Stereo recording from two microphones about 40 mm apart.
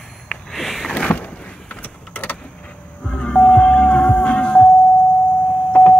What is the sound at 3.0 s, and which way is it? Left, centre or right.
Music, left.